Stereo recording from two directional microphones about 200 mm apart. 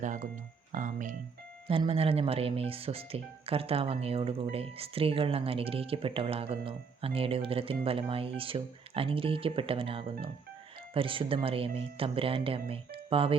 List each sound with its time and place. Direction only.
0.0 s speech: 40° right (ahead or behind)
0.7 s music: 40° right (ahead or behind)
1.6 s speech: 25° right (ahead or behind)